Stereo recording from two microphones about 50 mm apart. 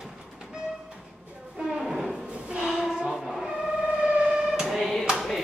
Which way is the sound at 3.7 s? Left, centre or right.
Centre.